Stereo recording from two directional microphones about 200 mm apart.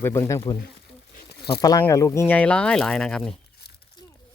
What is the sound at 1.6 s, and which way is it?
Speech, 15° left (ahead or behind).